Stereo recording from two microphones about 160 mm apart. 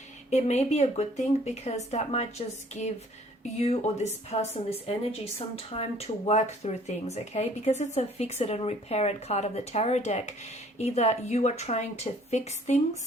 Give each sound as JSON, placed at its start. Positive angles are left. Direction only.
{"t": 0.3, "sound": "speech", "side_deg": 45}
{"t": 3.6, "sound": "speech", "side_deg": 40}